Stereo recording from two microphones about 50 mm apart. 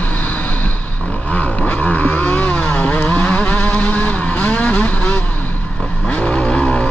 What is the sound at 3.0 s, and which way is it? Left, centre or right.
Vehicle, left.